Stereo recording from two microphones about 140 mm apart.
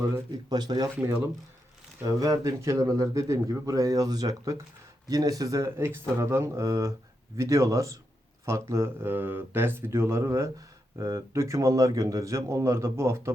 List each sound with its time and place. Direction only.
0.5 s speech: 30° right (ahead or behind)
2.0 s speech: 25° right (ahead or behind)